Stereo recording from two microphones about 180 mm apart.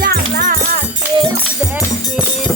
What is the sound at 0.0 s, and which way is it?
Music, 55° right (ahead or behind).